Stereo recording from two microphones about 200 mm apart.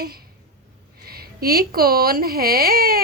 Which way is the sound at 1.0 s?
50° right (ahead or behind).